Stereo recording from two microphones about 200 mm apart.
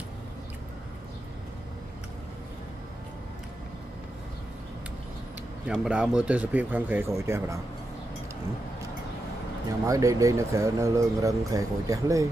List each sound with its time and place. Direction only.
5.7 s speech: 5° right (ahead or behind)
9.8 s speech: 15° right (ahead or behind)